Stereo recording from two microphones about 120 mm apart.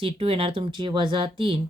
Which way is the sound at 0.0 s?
50° right (ahead or behind).